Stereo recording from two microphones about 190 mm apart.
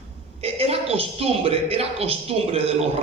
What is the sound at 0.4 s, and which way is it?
Speech, 30° right (ahead or behind).